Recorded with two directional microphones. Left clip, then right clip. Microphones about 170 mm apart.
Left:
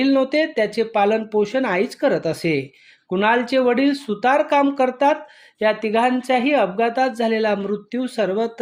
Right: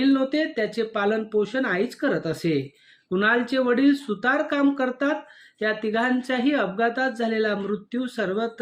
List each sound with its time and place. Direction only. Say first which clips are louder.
0.0 s speech: left 5 dB; 15° left (ahead or behind)